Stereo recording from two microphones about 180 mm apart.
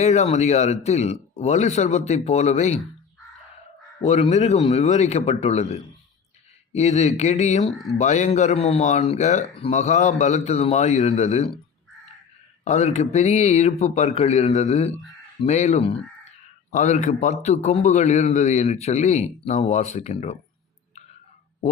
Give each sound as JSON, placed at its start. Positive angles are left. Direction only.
{"t": 0.0, "sound": "speech", "side_deg": 40}
{"t": 4.0, "sound": "speech", "side_deg": 35}
{"t": 12.6, "sound": "speech", "side_deg": 40}